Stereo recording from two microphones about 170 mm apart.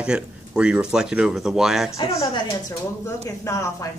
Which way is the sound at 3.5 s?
15° left (ahead or behind).